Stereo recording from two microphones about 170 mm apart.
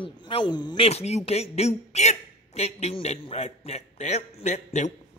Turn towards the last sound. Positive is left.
turn(degrees=45)  # may be behind; listen again after turning